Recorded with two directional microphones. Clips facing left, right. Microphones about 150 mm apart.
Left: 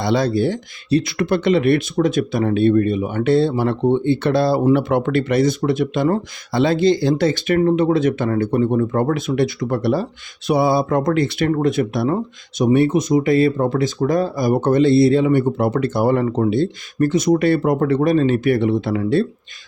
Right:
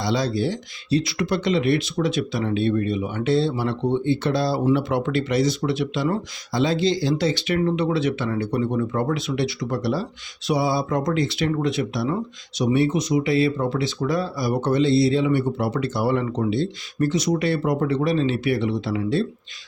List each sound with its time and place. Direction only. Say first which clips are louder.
0.0 s speech: left 5 dB; 55° left (ahead or behind)